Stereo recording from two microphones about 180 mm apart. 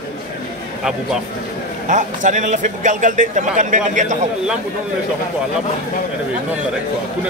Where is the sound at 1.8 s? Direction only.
45° right (ahead or behind).